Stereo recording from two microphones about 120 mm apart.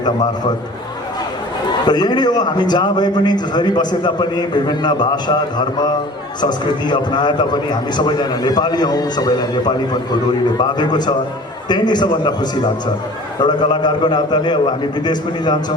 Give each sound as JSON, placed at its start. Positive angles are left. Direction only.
{"t": 1.6, "sound": "a man's voice", "side_deg": 35}